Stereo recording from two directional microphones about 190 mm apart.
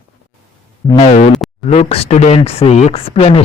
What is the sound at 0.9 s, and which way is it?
Speech, 35° left (ahead or behind).